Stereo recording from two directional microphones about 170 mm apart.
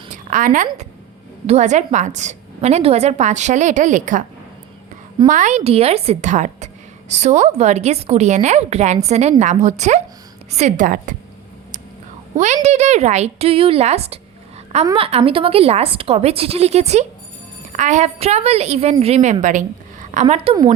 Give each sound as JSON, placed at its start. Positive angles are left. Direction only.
{"t": 0.1, "sound": "a woman's voice", "side_deg": -50}
{"t": 5.3, "sound": "a woman's voice", "side_deg": -45}
{"t": 12.6, "sound": "a woman's voice", "side_deg": -40}